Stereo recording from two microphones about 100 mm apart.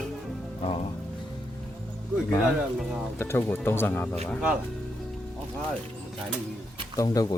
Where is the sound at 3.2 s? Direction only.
25° left (ahead or behind).